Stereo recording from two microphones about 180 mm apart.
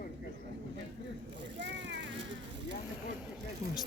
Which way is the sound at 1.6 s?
80° right.